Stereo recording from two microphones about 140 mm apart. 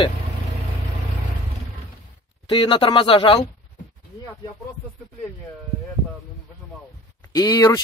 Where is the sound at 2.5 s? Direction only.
35° left (ahead or behind).